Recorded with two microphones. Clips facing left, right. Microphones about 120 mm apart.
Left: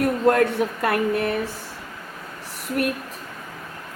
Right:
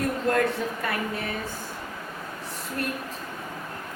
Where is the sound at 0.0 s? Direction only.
65° left (ahead or behind).